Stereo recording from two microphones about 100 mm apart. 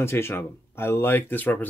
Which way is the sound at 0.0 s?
25° left (ahead or behind).